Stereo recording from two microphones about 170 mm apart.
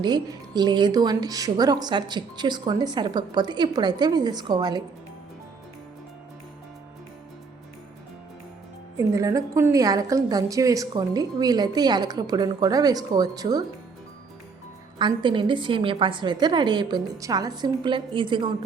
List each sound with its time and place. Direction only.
0.0 s a woman's voice: 25° right (ahead or behind)
9.0 s a woman's voice: 20° right (ahead or behind)
14.9 s a woman's voice: 30° right (ahead or behind)